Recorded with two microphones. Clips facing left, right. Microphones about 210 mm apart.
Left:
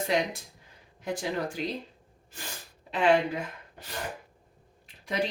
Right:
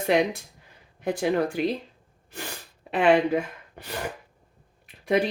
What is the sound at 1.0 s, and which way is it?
Speech, 60° right (ahead or behind).